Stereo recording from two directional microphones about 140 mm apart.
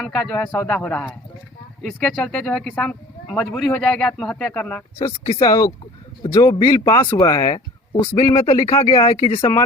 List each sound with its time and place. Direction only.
0.0 s speech: 5° left (ahead or behind)
4.9 s speech: 30° left (ahead or behind)
9.2 s speech: 45° left (ahead or behind)